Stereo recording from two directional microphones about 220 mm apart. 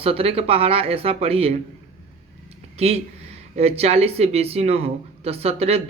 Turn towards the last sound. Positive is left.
turn(degrees=-30)  # may be behind; listen again after turning